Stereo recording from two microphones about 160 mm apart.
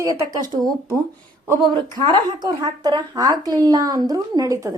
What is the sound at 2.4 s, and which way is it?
Speech, 25° right (ahead or behind).